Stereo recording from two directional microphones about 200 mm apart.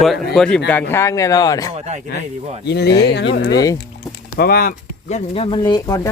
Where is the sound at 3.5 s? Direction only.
15° left (ahead or behind).